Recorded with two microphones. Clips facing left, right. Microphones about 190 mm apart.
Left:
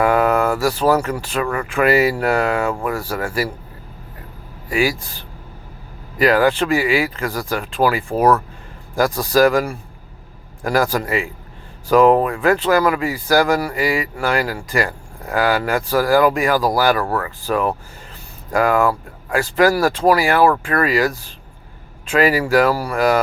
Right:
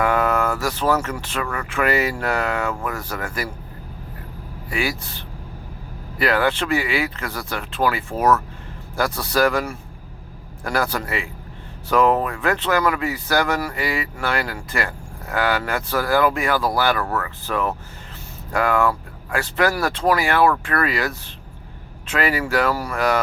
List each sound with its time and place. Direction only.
0.0 s a sound: 35° left (ahead or behind)
0.8 s speech: 35° left (ahead or behind)
6.1 s speech: 40° left (ahead or behind)
11.9 s speech: 35° left (ahead or behind)
22.1 s speech: 35° left (ahead or behind)